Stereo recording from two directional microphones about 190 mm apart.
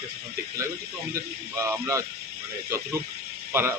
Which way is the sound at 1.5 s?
15° right (ahead or behind).